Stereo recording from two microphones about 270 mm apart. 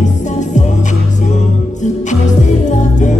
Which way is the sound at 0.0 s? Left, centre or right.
Left.